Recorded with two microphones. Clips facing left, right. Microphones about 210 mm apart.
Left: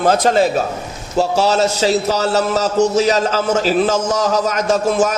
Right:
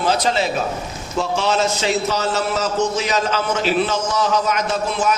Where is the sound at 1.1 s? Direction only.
35° left (ahead or behind).